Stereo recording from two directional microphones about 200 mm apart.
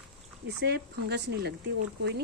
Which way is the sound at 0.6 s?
55° right (ahead or behind).